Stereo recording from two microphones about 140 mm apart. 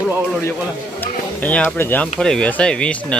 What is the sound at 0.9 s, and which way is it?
Music, 10° left (ahead or behind).